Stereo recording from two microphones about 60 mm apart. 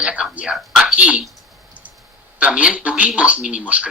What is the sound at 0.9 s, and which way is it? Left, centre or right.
Speech, centre.